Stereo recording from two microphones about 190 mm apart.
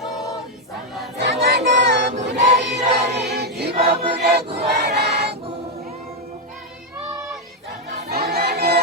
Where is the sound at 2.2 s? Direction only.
65° right (ahead or behind).